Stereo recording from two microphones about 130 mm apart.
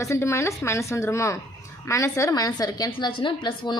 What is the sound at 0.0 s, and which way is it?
A woman's voice, 20° left (ahead or behind).